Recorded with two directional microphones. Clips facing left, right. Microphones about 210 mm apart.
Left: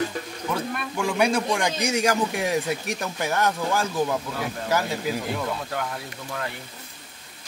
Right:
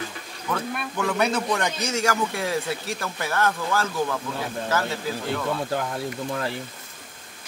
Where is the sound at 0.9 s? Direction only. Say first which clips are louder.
Left 1 dB; 10° left (ahead or behind).